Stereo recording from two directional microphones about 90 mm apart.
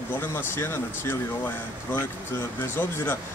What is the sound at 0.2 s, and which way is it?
Speech, 25° left (ahead or behind).